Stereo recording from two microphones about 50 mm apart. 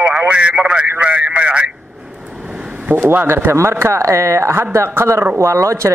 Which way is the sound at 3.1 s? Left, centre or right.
Right.